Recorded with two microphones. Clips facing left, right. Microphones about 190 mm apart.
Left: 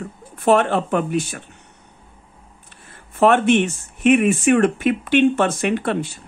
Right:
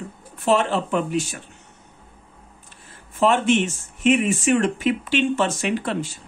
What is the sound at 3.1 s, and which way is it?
Speech, 60° left (ahead or behind).